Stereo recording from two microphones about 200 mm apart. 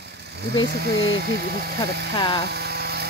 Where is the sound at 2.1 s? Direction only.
25° left (ahead or behind).